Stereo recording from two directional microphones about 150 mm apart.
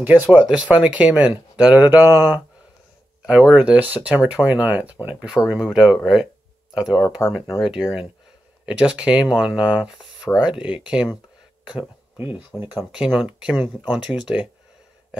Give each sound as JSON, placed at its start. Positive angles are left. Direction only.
{"t": 0.0, "sound": "speech", "side_deg": -10}
{"t": 7.2, "sound": "speech", "side_deg": 25}
{"t": 7.6, "sound": "speech", "side_deg": -5}
{"t": 12.2, "sound": "speech", "side_deg": -10}